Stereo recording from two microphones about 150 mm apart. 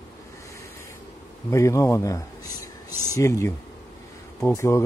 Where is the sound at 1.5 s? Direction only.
20° left (ahead or behind).